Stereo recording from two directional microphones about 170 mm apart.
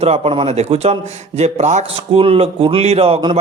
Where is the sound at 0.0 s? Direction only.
35° right (ahead or behind).